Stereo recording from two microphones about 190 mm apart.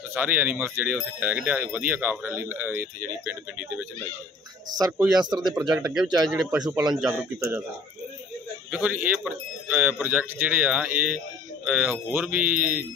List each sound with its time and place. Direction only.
0.1 s speech: 10° right (ahead or behind)
4.6 s speech: 20° right (ahead or behind)
5.5 s speech: centre (ahead or behind)
6.6 s speech: 20° right (ahead or behind)
6.9 s speech: centre (ahead or behind)
8.7 s speech: 10° right (ahead or behind)